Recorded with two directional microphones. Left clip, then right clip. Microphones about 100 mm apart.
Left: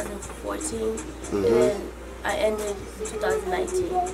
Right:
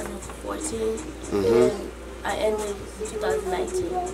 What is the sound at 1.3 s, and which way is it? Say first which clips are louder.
Speech: right 1 dB; 20° right (ahead or behind).